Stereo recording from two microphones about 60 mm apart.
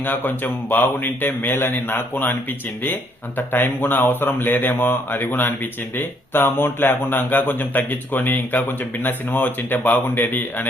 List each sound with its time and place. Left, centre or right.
0.0 s a man's voice: left